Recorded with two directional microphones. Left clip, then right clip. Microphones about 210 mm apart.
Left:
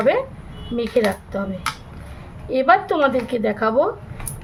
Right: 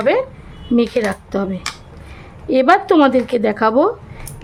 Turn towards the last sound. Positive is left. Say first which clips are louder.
# right 4 dB
turn(degrees=-50)  # may be behind; listen again after turning